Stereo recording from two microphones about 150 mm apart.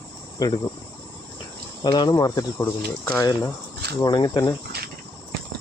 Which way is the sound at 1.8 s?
30° left (ahead or behind).